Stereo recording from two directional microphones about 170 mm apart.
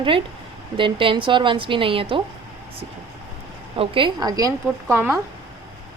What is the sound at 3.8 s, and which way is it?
A woman's voice, 30° right (ahead or behind).